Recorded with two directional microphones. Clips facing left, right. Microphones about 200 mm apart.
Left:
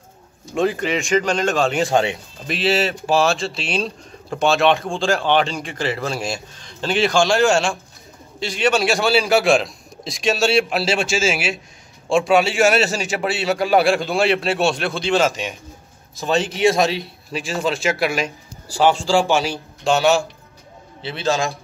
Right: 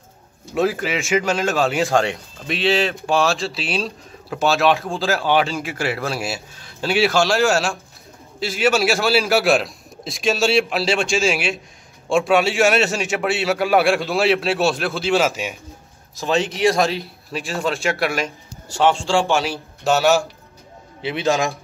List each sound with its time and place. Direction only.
0.6 s a man's voice: 5° right (ahead or behind)